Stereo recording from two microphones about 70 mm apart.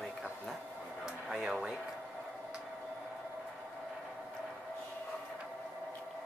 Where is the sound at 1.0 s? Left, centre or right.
Centre.